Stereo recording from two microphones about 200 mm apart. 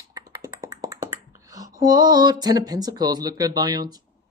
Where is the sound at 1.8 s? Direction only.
20° right (ahead or behind).